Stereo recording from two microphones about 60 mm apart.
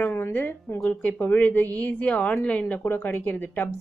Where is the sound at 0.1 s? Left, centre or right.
Left.